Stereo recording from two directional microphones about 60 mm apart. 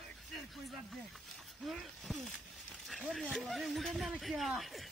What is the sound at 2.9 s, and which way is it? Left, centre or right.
Speech, centre.